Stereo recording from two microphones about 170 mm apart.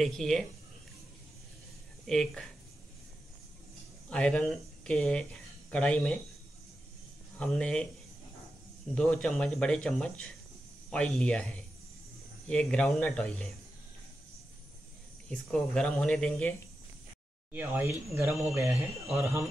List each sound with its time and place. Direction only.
0.0 s speech: centre (ahead or behind)
2.0 s speech: centre (ahead or behind)
4.1 s speech: 5° left (ahead or behind)
7.3 s speech: 5° left (ahead or behind)
8.9 s speech: 5° left (ahead or behind)
15.2 s speech: 5° left (ahead or behind)
17.5 s speech: 10° right (ahead or behind)